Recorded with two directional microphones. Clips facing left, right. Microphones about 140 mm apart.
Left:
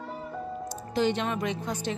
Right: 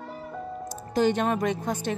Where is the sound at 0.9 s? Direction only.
45° right (ahead or behind).